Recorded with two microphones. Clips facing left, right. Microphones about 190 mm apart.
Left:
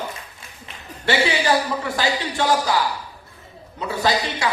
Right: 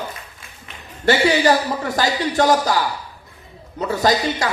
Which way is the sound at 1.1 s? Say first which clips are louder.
Right 4 dB; 40° right (ahead or behind).